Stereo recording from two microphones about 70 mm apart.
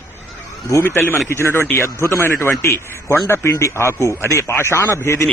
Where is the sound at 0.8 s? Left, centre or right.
Left.